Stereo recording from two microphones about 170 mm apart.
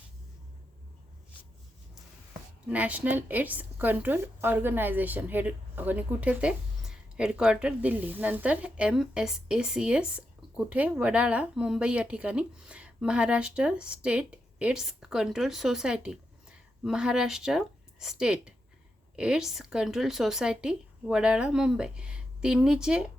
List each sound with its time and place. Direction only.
2.6 s a woman's voice: 10° right (ahead or behind)